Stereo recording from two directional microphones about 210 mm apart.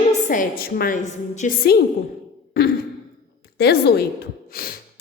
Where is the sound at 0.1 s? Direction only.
40° left (ahead or behind).